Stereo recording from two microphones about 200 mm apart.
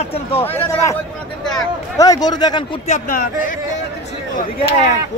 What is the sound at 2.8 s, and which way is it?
Speech, 40° left (ahead or behind).